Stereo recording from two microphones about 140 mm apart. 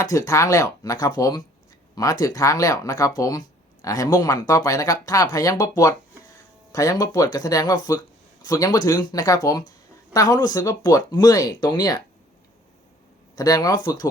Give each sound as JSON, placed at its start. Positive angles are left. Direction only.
{"t": 0.0, "sound": "speech", "side_deg": 25}
{"t": 13.3, "sound": "speech", "side_deg": 25}